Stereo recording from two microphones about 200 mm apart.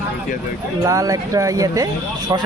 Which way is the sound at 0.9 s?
15° right (ahead or behind).